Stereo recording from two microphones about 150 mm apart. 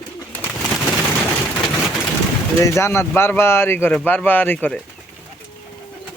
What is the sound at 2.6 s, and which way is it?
Speech, 20° left (ahead or behind).